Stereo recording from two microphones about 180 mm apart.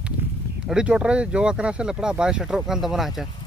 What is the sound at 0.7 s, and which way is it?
Speech, 5° right (ahead or behind).